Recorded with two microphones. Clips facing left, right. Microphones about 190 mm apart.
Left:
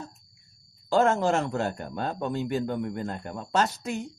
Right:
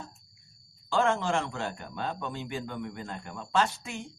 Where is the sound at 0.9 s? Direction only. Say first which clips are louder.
Left 5 dB; 40° left (ahead or behind).